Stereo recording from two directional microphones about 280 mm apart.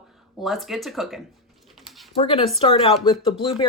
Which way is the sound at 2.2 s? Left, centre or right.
Centre.